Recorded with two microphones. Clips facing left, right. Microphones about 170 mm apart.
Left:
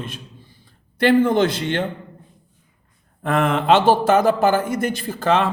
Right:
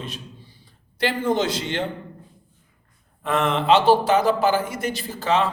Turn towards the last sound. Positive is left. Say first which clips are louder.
# left 3 dB
turn(degrees=55)  # may be behind; listen again after turning